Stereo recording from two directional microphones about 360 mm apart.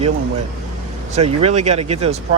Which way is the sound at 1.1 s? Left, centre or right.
Centre.